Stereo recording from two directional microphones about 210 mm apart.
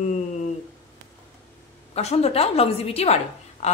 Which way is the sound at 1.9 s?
30° left (ahead or behind).